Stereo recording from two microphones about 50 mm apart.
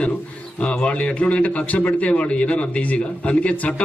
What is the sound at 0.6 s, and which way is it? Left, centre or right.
A man's voice, left.